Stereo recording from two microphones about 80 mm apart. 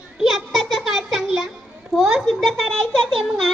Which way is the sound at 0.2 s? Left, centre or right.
Centre.